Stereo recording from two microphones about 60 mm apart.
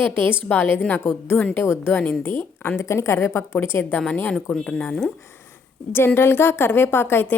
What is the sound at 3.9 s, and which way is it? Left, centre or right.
Speech, left.